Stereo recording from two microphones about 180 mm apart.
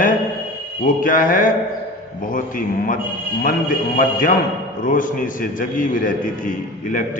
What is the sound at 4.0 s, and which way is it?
A man's voice, 50° left (ahead or behind).